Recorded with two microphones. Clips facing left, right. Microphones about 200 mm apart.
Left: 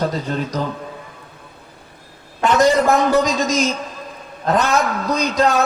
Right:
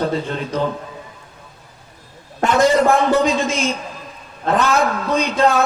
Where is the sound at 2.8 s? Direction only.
40° left (ahead or behind).